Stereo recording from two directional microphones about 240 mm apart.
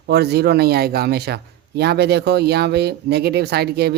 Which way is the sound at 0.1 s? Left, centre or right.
Right.